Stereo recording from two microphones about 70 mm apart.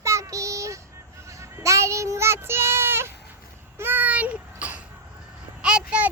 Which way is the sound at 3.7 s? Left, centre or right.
Right.